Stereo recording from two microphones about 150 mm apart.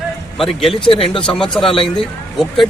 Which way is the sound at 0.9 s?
35° left (ahead or behind).